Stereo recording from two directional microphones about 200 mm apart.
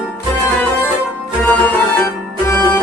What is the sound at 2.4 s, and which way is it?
Music, 10° left (ahead or behind).